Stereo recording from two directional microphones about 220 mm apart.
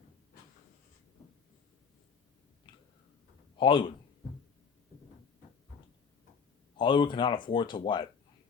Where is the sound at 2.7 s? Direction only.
20° left (ahead or behind).